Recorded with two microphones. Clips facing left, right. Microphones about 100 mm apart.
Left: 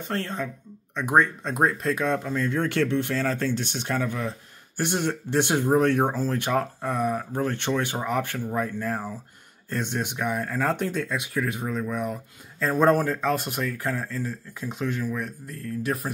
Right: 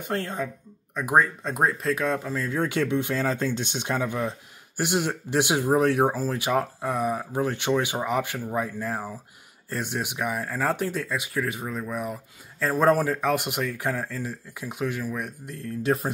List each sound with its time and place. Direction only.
0.0 s speech: 15° right (ahead or behind)